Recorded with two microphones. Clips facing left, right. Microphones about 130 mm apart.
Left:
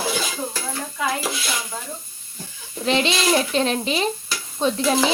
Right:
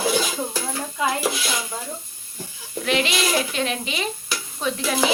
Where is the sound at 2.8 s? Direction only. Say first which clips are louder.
Left 2 dB; 30° left (ahead or behind).